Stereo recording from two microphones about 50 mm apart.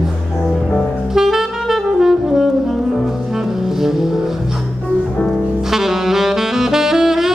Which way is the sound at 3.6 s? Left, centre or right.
Centre.